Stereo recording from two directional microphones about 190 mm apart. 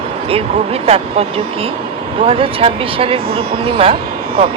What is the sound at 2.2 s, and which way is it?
Speech, 30° right (ahead or behind).